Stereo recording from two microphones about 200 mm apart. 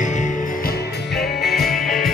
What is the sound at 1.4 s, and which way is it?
Music, centre (ahead or behind).